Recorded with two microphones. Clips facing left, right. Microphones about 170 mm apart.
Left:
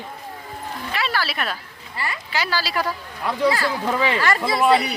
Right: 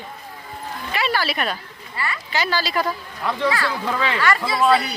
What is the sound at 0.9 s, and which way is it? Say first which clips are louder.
Speech: right 3 dB; centre (ahead or behind).